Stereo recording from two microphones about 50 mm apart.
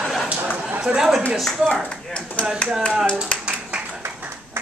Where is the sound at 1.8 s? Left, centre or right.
Left.